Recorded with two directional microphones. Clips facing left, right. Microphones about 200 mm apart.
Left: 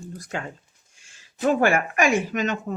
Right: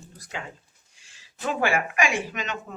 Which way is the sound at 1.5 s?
45° left (ahead or behind).